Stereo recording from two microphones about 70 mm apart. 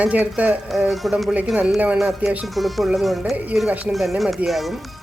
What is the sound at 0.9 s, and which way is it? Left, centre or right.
Speech, centre.